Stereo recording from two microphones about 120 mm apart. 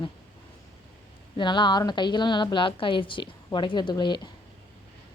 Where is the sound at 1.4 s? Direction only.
40° left (ahead or behind).